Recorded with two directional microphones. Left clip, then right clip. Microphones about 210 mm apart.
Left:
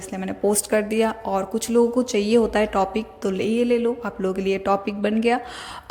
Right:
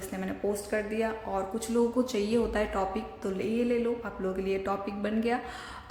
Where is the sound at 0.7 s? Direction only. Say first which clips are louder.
Left 9 dB; 50° left (ahead or behind).